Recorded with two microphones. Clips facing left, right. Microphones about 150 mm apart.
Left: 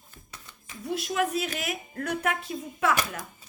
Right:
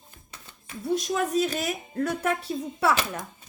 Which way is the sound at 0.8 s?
35° right (ahead or behind).